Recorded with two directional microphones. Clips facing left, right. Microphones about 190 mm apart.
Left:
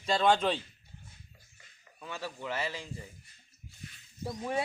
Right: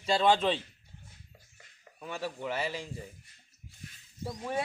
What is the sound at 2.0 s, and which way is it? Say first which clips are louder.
Speech: right 3 dB; 15° right (ahead or behind).